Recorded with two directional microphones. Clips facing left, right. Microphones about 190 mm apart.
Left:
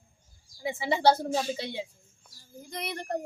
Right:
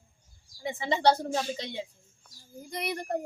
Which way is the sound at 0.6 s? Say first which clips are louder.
Left 1 dB; 5° left (ahead or behind).